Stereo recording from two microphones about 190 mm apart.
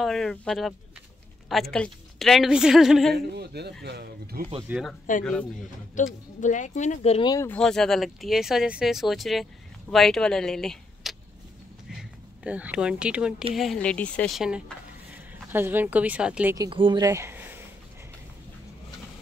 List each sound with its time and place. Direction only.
0.0 s speech: centre (ahead or behind)
3.2 s speech: 60° right (ahead or behind)
4.6 s speech: centre (ahead or behind)
6.0 s speech: 40° left (ahead or behind)
7.2 s speech: 15° left (ahead or behind)
7.5 s speech: 5° left (ahead or behind)
11.9 s a sound: 5° right (ahead or behind)
13.6 s speech: 5° left (ahead or behind)
16.5 s speech: 25° right (ahead or behind)